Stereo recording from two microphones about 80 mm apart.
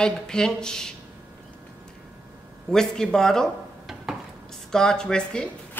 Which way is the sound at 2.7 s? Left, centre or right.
Centre.